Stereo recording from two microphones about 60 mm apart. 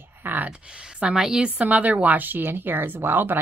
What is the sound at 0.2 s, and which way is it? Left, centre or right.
Speech, right.